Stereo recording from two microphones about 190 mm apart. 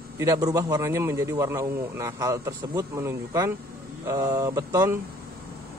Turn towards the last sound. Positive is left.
turn(degrees=-15)  # may be behind; listen again after turning